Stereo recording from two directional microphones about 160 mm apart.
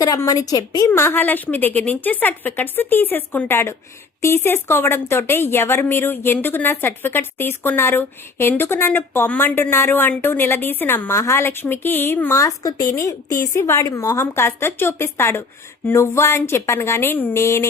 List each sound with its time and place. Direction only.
0.0 s a woman's voice: 20° left (ahead or behind)